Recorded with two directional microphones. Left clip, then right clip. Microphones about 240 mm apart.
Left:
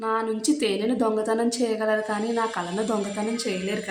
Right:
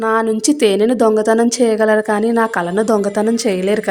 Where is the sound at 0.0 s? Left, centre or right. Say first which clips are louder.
Right 10 dB; right.